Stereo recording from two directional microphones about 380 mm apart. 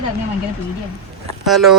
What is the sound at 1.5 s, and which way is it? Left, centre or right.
Speech, centre.